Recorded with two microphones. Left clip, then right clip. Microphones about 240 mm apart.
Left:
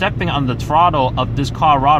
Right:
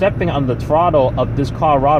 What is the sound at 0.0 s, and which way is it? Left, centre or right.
Speech, left.